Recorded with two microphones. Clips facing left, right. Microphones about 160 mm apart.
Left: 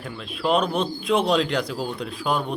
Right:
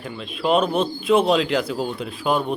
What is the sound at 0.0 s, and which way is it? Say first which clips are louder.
Speech: right 2 dB; centre (ahead or behind).